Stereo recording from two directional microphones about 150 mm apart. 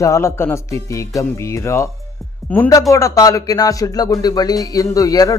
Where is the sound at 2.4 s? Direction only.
Centre (ahead or behind).